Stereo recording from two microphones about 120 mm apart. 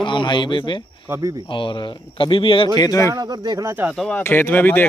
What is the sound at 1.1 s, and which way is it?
Speech, 30° right (ahead or behind).